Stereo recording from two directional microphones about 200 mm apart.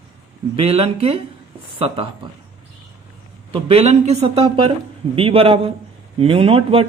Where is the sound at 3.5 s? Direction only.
30° right (ahead or behind).